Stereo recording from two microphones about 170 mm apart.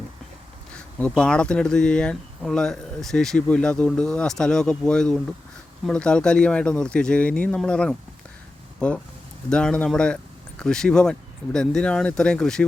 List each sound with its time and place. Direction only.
0.9 s speech: 5° left (ahead or behind)
9.5 s speech: 5° left (ahead or behind)